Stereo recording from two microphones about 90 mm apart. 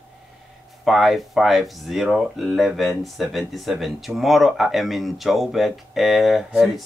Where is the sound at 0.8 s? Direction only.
Centre (ahead or behind).